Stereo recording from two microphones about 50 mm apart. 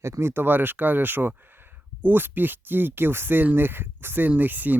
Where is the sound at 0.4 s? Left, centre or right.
Right.